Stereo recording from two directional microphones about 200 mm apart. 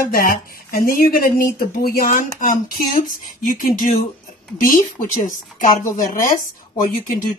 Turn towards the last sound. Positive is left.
turn(degrees=40)  # may be behind; listen again after turning